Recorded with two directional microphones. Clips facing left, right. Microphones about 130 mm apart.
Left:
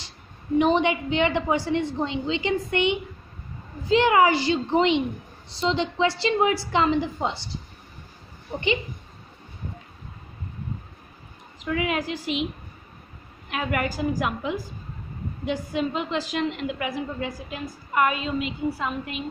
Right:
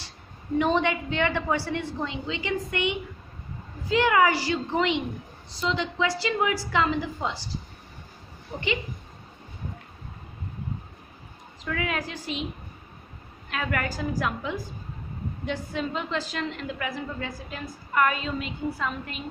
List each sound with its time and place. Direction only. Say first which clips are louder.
0.6 s a woman's voice: left 3 dB; 20° left (ahead or behind)
11.6 s a woman's voice: left 4 dB; 10° left (ahead or behind)
13.5 s a woman's voice: left 3 dB; 10° left (ahead or behind)